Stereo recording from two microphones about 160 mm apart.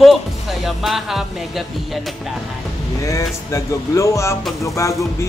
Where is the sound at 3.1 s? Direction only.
20° left (ahead or behind).